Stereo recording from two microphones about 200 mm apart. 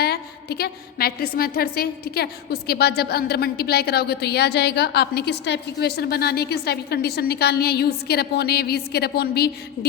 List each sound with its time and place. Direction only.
0.0 s a woman's voice: 55° left (ahead or behind)